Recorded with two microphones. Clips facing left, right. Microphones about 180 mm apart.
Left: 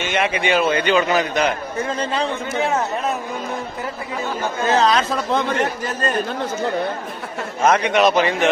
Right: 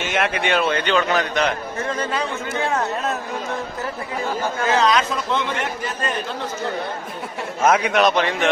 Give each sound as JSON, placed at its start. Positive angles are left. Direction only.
{"t": 0.0, "sound": "a man's voice", "side_deg": 0}
{"t": 2.0, "sound": "speech", "side_deg": 25}
{"t": 4.6, "sound": "a man's voice", "side_deg": 30}
{"t": 7.6, "sound": "a man's voice", "side_deg": -5}